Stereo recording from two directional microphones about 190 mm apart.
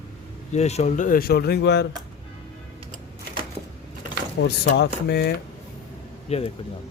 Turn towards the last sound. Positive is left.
turn(degrees=35)  # may be behind; listen again after turning